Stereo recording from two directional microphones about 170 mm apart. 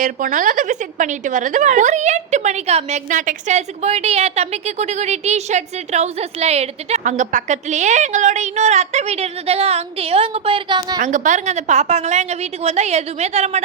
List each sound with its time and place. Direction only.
0.0 s a woman's voice: 50° right (ahead or behind); by 11.0 s 25° right (ahead or behind)
11.0 s a woman's voice: 45° right (ahead or behind)